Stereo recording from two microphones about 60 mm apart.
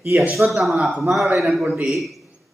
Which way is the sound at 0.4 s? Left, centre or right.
Right.